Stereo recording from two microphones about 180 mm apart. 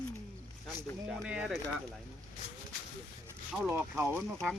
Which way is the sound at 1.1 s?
5° right (ahead or behind).